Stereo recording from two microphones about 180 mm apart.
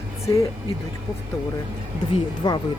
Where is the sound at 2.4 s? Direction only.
25° left (ahead or behind).